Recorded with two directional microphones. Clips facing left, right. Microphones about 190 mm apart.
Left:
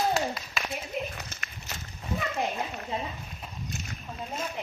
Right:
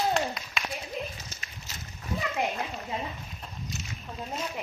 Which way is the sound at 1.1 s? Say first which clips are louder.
Left 3 dB; 65° left (ahead or behind).